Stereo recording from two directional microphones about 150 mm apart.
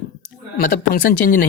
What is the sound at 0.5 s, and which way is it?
Speech, 75° left (ahead or behind).